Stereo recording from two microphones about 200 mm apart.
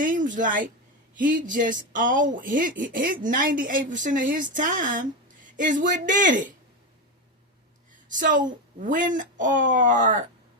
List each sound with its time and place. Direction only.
0.0 s speech: 40° right (ahead or behind)
8.1 s speech: 40° right (ahead or behind)